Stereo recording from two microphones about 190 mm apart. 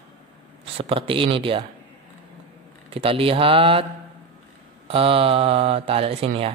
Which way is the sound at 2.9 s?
30° right (ahead or behind).